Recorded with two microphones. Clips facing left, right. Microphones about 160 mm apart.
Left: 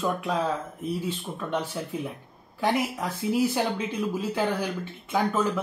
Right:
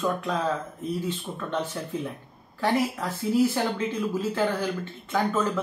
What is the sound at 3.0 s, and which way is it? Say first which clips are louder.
Speech: even; 15° left (ahead or behind).